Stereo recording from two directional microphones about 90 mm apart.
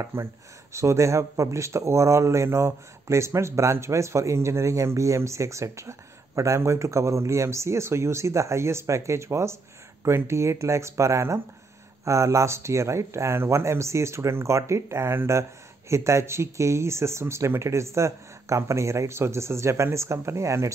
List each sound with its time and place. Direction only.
0.0 s speech: 30° right (ahead or behind)